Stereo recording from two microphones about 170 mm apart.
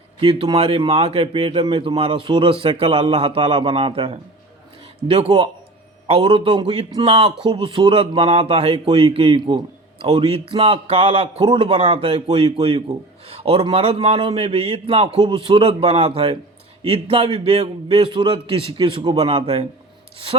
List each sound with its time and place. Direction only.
0.2 s a man's voice: 30° right (ahead or behind)